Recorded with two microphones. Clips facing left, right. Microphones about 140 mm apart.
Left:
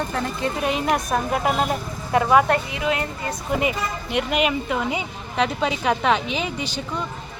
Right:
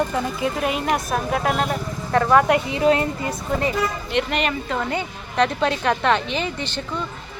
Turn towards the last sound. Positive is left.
turn(degrees=5)  # may be behind; listen again after turning